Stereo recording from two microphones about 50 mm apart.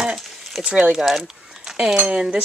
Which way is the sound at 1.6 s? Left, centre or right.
Centre.